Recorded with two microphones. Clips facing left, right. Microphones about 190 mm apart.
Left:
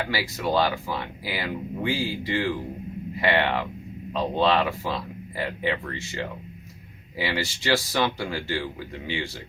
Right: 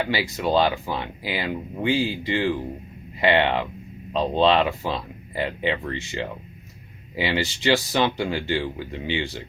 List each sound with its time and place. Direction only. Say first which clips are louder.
0.0 s speech: right 3 dB; 20° right (ahead or behind)